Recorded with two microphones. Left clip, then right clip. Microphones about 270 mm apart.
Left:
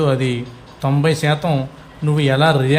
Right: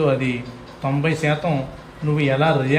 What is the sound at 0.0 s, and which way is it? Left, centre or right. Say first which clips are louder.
A man's voice: left 1 dB; left.